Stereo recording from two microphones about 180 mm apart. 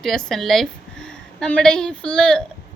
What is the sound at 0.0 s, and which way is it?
A woman's voice, centre (ahead or behind).